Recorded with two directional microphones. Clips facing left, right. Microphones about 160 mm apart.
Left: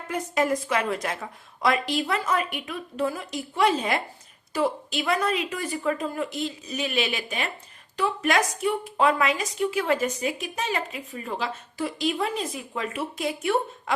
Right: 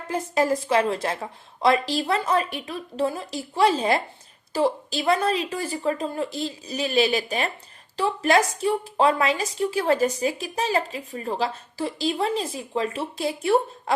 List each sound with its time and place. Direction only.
0.1 s a woman's voice: 30° right (ahead or behind)